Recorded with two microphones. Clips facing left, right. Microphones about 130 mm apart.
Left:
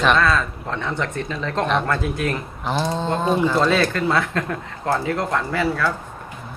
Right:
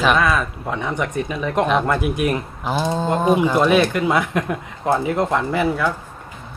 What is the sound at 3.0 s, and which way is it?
Speech, 15° right (ahead or behind).